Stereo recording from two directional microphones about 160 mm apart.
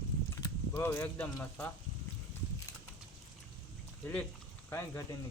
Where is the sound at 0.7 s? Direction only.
15° left (ahead or behind).